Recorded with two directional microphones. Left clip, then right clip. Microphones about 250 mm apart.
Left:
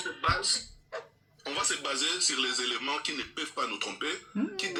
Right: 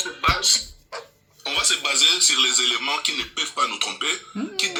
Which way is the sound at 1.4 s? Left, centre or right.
Centre.